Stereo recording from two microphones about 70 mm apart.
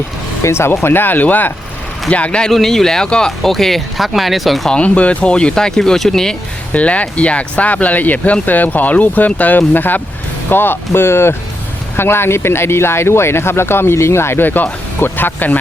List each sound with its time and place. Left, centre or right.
0.4 s speech: left; by 2.5 s centre
2.5 s speech: centre
4.7 s speech: centre
6.7 s speech: centre